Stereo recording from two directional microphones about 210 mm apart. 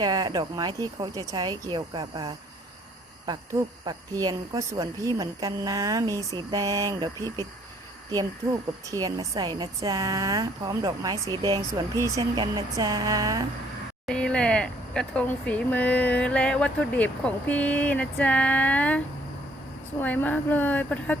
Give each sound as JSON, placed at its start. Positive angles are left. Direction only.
{"t": 0.0, "sound": "speech", "side_deg": -20}
{"t": 8.9, "sound": "speech", "side_deg": -15}
{"t": 14.1, "sound": "a woman's voice", "side_deg": 5}